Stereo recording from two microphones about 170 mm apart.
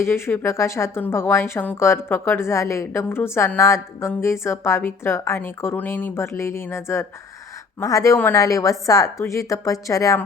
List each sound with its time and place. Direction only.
0.0 s a woman's voice: 15° left (ahead or behind)